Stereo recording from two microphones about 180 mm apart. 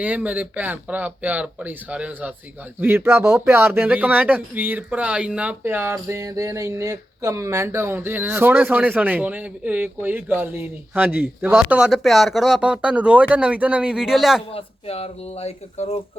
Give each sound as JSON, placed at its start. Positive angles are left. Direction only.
{"t": 0.0, "sound": "speech", "side_deg": -10}
{"t": 14.5, "sound": "speech", "side_deg": 35}